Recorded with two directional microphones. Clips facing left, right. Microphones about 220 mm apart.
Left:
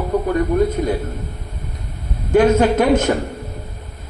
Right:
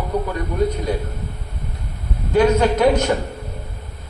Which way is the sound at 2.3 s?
50° left (ahead or behind).